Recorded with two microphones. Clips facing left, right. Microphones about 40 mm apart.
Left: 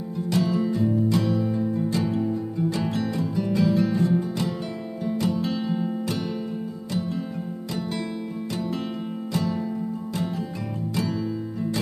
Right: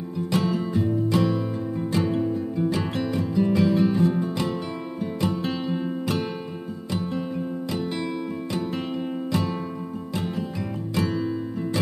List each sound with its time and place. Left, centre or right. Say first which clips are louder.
0.3 s music: left 1 dB; right
9.3 s music: left 1 dB; right